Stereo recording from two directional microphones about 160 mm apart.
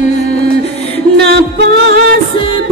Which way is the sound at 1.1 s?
90° right.